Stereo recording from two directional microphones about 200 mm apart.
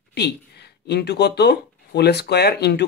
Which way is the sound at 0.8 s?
55° left (ahead or behind).